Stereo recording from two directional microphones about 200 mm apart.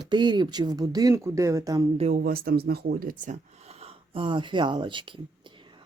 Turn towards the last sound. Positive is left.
turn(degrees=-25)  # may be behind; listen again after turning